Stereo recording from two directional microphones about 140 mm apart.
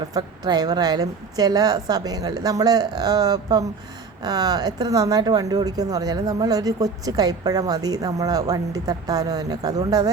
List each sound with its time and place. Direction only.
0.1 s speech: 30° right (ahead or behind)